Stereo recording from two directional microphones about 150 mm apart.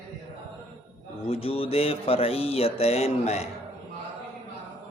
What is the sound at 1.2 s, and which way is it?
Speech, 40° left (ahead or behind).